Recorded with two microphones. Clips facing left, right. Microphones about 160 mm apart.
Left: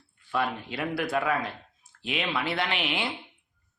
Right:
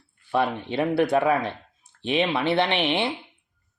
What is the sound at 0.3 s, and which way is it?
A man's voice, 25° right (ahead or behind).